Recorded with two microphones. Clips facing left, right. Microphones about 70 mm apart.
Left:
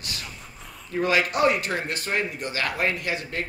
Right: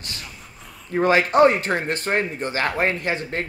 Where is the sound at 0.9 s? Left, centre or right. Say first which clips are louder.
Right 6 dB; right.